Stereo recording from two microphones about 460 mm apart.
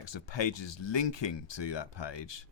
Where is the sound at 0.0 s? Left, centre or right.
Left.